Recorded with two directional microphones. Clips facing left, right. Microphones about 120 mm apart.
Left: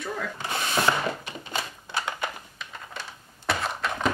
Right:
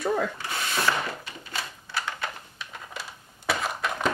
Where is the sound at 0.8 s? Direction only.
20° left (ahead or behind).